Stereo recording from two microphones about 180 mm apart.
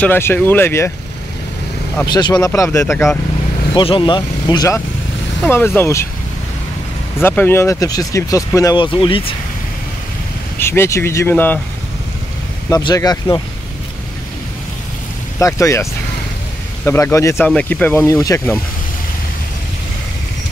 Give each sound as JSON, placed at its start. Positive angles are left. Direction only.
{"t": 0.0, "sound": "speech", "side_deg": 10}
{"t": 2.1, "sound": "speech", "side_deg": 20}
{"t": 3.7, "sound": "speech", "side_deg": 30}
{"t": 7.2, "sound": "speech", "side_deg": 10}
{"t": 10.6, "sound": "speech", "side_deg": 15}
{"t": 12.6, "sound": "speech", "side_deg": 20}
{"t": 15.3, "sound": "speech", "side_deg": 15}